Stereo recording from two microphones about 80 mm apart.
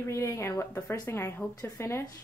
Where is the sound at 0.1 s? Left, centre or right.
Left.